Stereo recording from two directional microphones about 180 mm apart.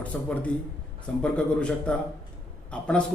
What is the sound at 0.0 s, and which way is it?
A man's voice, 5° left (ahead or behind).